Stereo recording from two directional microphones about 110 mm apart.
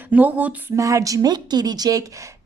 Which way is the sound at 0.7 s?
30° right (ahead or behind).